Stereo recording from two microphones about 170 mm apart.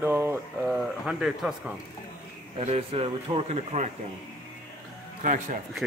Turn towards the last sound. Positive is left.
turn(degrees=-50)  # may be behind; listen again after turning